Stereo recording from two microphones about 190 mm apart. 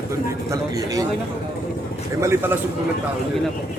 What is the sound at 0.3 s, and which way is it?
Speech, 15° right (ahead or behind).